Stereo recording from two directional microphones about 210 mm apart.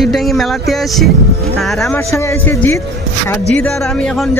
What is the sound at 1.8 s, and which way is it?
Speech, 15° left (ahead or behind).